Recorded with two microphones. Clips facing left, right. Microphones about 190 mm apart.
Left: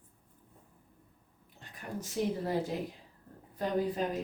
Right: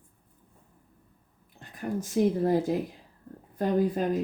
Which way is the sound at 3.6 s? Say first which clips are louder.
Right 6 dB; 50° right (ahead or behind).